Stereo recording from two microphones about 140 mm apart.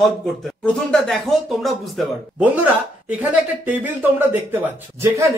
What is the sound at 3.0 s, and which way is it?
Speech, 10° right (ahead or behind).